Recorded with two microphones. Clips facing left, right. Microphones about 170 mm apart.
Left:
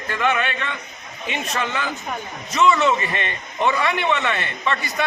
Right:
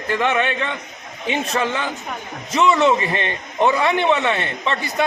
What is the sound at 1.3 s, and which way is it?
A man's voice, 30° right (ahead or behind).